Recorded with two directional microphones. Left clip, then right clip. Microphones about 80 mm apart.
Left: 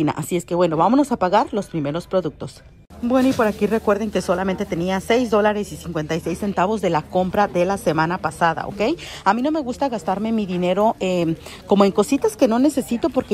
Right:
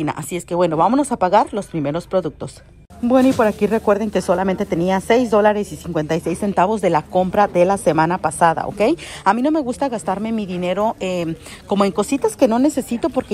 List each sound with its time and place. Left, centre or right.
0.5 s a woman's voice: left
3.1 s a woman's voice: left
12.4 s a woman's voice: left